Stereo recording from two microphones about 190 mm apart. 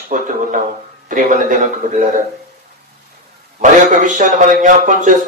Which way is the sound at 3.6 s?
40° right (ahead or behind).